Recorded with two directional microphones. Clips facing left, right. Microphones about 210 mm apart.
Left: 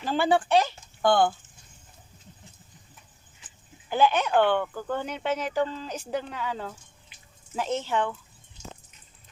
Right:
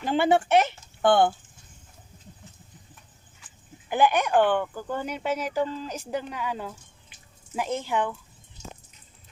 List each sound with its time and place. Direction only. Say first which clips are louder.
0.0 s speech: right 2 dB; 20° right (ahead or behind)
3.8 s speech: right 1 dB; 15° right (ahead or behind)